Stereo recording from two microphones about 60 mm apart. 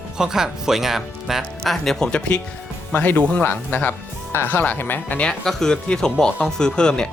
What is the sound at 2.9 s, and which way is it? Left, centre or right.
Speech, left.